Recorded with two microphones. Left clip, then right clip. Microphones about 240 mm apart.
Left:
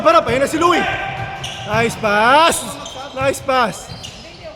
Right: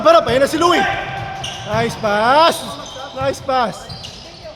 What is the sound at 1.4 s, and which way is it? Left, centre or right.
Speech, centre.